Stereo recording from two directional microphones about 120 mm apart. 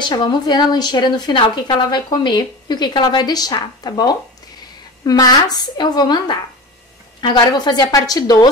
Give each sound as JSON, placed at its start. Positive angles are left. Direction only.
{"t": 0.0, "sound": "speech", "side_deg": 40}